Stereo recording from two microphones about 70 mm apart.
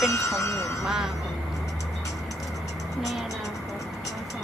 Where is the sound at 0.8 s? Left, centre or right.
Centre.